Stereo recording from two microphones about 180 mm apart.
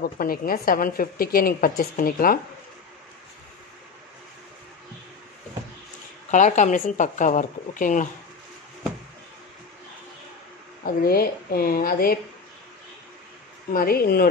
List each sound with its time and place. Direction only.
0.0 s a woman's voice: 55° left (ahead or behind)
6.3 s a woman's voice: 45° left (ahead or behind)
10.8 s speech: 55° left (ahead or behind)
13.7 s speech: 60° left (ahead or behind)